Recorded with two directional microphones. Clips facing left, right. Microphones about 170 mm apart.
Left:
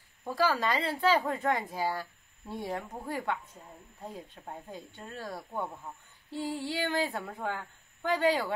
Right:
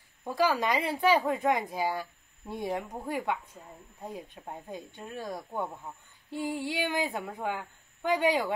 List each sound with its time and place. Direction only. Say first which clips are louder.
0.4 s speech: right 2 dB; 15° right (ahead or behind)